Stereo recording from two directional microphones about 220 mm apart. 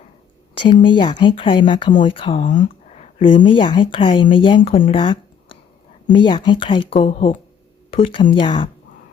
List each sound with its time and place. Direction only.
0.7 s speech: 20° left (ahead or behind)
2.5 s speech: 35° left (ahead or behind)
4.9 s a sound: 20° left (ahead or behind)
6.1 s speech: 20° left (ahead or behind)